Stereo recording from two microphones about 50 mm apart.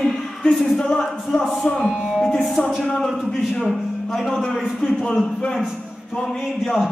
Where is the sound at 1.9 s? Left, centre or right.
Centre.